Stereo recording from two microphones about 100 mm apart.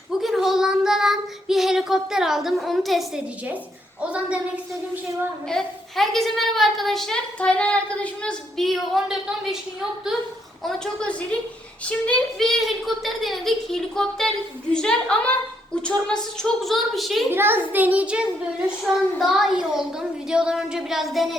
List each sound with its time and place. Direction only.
0.2 s child singing: centre (ahead or behind)
4.1 s a child's voice: 10° right (ahead or behind)
5.5 s a woman's voice: 5° left (ahead or behind)
10.6 s a woman's voice: 5° left (ahead or behind)
17.3 s a child's voice: 20° right (ahead or behind); by 21.2 s centre (ahead or behind)